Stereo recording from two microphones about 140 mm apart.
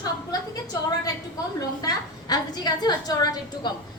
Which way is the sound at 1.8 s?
25° left (ahead or behind).